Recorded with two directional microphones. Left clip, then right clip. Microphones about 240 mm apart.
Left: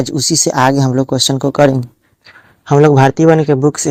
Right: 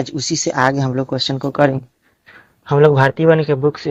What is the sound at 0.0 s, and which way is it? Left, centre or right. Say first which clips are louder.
Speech: left 6 dB; left.